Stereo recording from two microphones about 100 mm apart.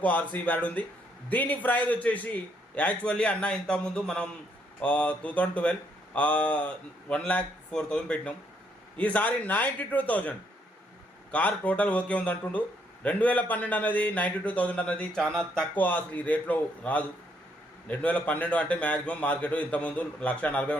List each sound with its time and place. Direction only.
0.0 s speech: 15° left (ahead or behind)